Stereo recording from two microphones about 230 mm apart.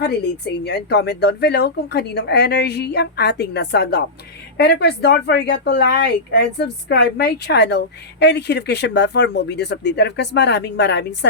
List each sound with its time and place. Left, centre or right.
0.0 s a woman's voice: left